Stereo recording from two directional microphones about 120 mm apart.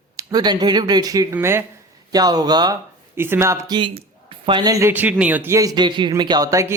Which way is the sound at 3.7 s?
45° right (ahead or behind).